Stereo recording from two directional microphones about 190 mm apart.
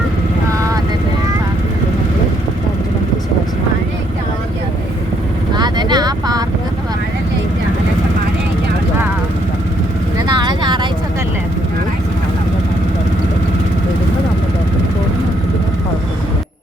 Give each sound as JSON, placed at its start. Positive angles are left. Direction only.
{"t": 5.5, "sound": "vehicle", "side_deg": -20}
{"t": 10.2, "sound": "vehicle", "side_deg": -25}